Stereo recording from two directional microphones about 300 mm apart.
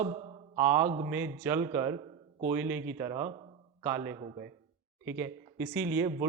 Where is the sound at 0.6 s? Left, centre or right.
Centre.